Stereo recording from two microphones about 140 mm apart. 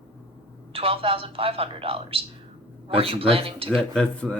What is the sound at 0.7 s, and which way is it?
Speech, 40° right (ahead or behind).